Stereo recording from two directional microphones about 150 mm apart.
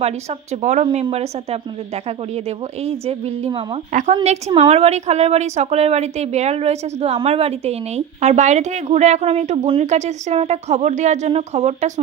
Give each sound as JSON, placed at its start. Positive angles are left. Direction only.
{"t": 0.0, "sound": "a woman's voice", "side_deg": -45}
{"t": 2.8, "sound": "a woman's voice", "side_deg": -45}